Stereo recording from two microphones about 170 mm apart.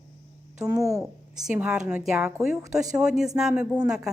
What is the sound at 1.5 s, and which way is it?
A woman's voice, 5° right (ahead or behind).